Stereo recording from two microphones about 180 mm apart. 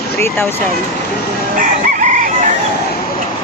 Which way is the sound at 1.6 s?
45° right (ahead or behind).